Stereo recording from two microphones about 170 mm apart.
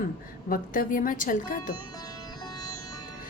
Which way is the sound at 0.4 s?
55° left (ahead or behind).